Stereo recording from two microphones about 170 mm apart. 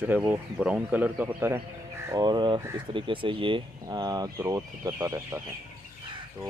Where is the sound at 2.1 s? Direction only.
25° right (ahead or behind).